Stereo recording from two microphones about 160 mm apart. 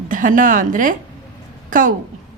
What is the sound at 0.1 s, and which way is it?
A woman's voice, 55° right (ahead or behind).